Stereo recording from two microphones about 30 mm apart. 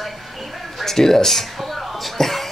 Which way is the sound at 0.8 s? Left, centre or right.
Centre.